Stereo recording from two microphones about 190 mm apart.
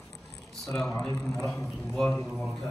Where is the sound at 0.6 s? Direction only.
5° left (ahead or behind).